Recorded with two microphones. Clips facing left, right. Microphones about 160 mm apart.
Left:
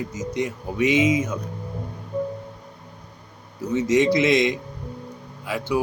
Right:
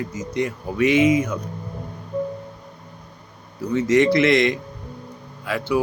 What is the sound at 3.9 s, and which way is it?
Speech, 15° left (ahead or behind).